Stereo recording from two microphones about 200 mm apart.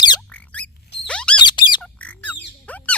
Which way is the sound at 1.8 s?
5° left (ahead or behind).